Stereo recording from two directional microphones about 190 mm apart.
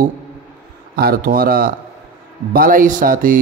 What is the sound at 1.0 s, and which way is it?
Mantra, 50° right (ahead or behind).